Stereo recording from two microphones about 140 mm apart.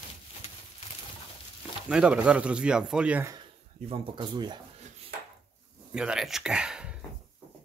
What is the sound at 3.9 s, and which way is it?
Speech, 35° right (ahead or behind).